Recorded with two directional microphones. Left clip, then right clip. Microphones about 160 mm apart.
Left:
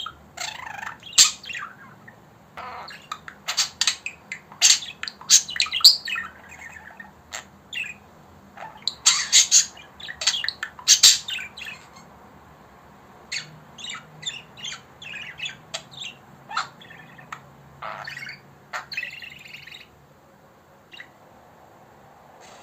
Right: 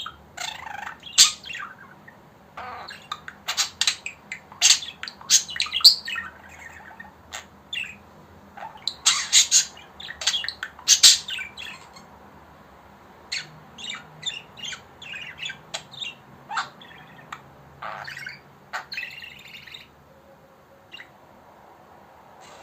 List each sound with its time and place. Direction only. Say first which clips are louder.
0.3 s bird: even; 15° left (ahead or behind)
2.6 s a sound: even; 20° left (ahead or behind)
7.3 s bird: right 2 dB; 20° left (ahead or behind)
13.3 s squawk: even; 15° left (ahead or behind)
17.7 s bird: left 1 dB; 15° left (ahead or behind)